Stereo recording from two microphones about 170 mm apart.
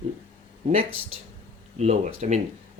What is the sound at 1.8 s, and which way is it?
Speech, 40° right (ahead or behind).